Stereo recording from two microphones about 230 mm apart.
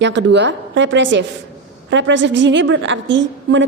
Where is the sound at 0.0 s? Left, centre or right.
Right.